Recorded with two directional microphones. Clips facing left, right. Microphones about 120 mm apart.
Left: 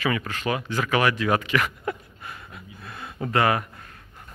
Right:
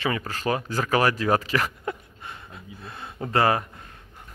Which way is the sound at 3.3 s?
30° right (ahead or behind).